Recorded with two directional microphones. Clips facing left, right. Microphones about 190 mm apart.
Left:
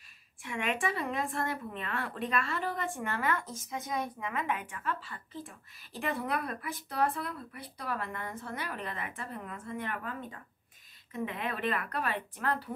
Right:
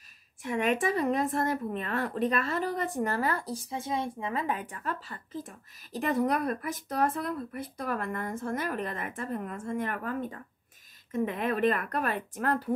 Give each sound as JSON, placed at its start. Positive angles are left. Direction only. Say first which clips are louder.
{"t": 0.4, "sound": "speech", "louder": "right 6 dB", "side_deg": -40}